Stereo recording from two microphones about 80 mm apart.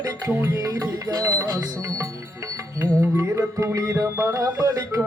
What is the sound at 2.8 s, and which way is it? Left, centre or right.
Music, right.